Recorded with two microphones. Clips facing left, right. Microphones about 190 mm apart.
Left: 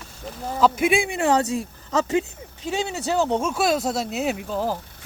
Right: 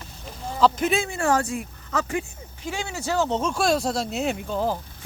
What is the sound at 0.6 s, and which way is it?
Speech, 10° left (ahead or behind).